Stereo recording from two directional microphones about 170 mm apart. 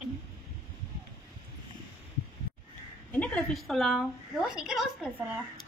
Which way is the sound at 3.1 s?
10° left (ahead or behind).